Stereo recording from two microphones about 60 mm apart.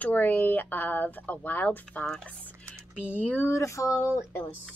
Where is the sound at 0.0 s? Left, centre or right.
Left.